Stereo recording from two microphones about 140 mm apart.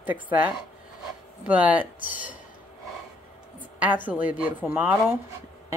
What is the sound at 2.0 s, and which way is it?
Speech, 70° left (ahead or behind).